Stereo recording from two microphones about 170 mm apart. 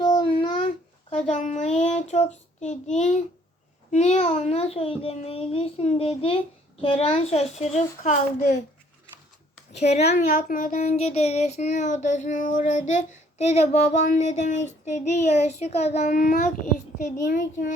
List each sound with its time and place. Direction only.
0.0 s child singing: 30° left (ahead or behind)
1.1 s child singing: 45° left (ahead or behind)
3.9 s a child's voice: 40° left (ahead or behind)
9.7 s a child's voice: 40° left (ahead or behind)
10.5 s child singing: 50° left (ahead or behind)